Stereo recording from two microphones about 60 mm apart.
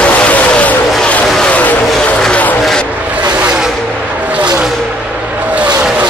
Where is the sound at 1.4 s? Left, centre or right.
Left.